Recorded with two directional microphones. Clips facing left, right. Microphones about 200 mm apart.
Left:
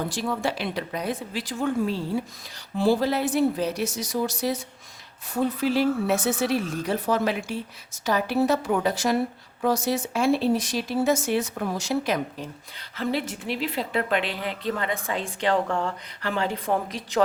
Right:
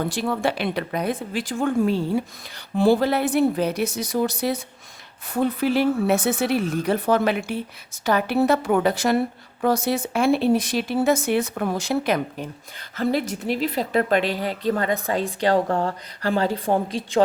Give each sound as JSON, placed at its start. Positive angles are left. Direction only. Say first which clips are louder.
{"t": 0.1, "sound": "speech", "louder": "right 4 dB", "side_deg": -60}
{"t": 13.0, "sound": "a woman's voice", "louder": "right 4 dB", "side_deg": -45}